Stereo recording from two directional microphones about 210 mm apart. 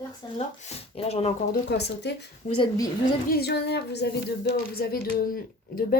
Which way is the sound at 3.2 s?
45° left (ahead or behind).